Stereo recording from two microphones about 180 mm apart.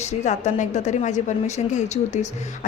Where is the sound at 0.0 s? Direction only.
40° left (ahead or behind).